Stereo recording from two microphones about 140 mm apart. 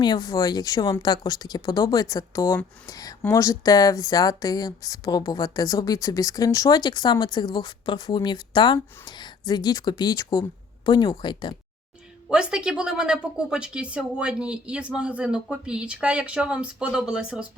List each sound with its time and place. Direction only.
0.0 s speech: 30° left (ahead or behind)
2.8 s a sound: 25° left (ahead or behind)
3.2 s speech: 20° left (ahead or behind)
12.3 s a woman's voice: 5° right (ahead or behind)